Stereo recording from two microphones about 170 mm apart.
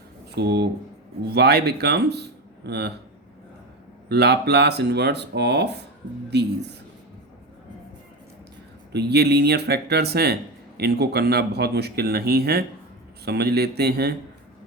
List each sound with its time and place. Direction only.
0.3 s speech: 80° right
4.1 s speech: 75° right (ahead or behind)
8.9 s speech: 75° right (ahead or behind)